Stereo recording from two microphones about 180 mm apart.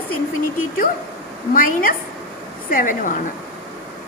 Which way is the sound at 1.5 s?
50° left (ahead or behind).